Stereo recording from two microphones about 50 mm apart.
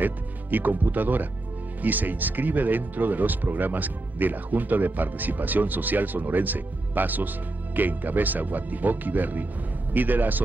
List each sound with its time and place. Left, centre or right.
0.0 s speech: right